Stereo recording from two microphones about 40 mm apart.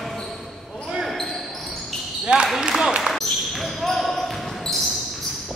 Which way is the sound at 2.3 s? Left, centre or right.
Right.